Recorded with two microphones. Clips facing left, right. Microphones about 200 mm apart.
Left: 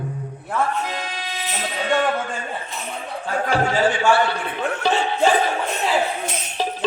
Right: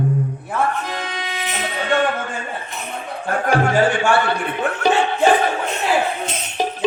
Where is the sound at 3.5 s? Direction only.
55° right (ahead or behind).